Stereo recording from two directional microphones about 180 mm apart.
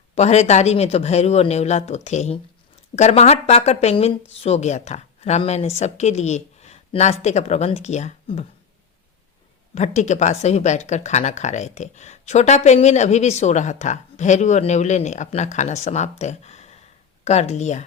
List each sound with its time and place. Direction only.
0.2 s speech: 35° left (ahead or behind)
9.7 s speech: 40° left (ahead or behind)